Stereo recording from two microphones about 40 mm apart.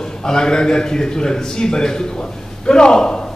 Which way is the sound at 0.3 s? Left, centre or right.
Centre.